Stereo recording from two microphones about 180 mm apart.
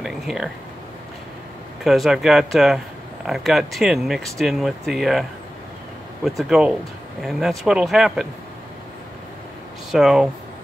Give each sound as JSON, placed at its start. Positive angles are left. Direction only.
{"t": 0.0, "sound": "a sound", "side_deg": 0}
{"t": 1.9, "sound": "speech", "side_deg": 0}
{"t": 6.2, "sound": "speech", "side_deg": 0}
{"t": 9.8, "sound": "speech", "side_deg": -5}